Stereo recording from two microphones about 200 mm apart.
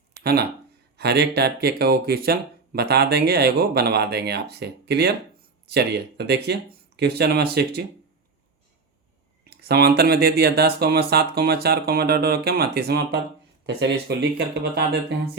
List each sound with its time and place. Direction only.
0.1 s a sound: 50° right (ahead or behind)
0.9 s speech: 55° right (ahead or behind)
9.5 s speech: 55° right (ahead or behind)